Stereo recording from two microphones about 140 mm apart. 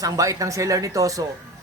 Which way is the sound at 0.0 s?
25° right (ahead or behind).